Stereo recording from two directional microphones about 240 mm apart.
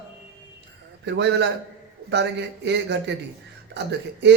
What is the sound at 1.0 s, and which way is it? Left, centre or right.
Speech, right.